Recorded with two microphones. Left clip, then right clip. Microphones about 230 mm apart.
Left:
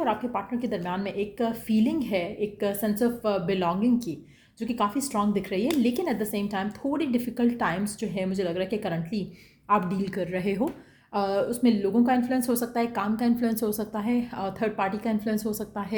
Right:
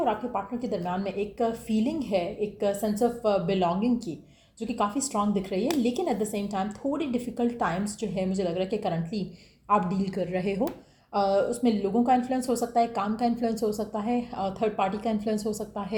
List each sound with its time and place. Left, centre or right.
0.0 s a woman's voice: left